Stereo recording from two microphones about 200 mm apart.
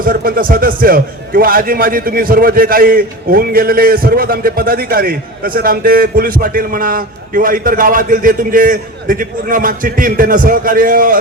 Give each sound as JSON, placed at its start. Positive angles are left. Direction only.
{"t": 0.0, "sound": "a man's voice", "side_deg": -45}